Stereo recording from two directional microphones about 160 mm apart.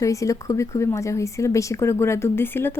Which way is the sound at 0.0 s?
20° left (ahead or behind).